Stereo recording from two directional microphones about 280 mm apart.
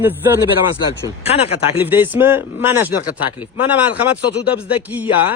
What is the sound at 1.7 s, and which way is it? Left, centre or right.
A man's voice, centre.